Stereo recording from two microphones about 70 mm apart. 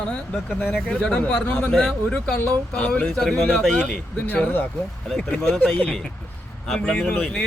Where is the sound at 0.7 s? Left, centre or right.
Centre; by 4.7 s left.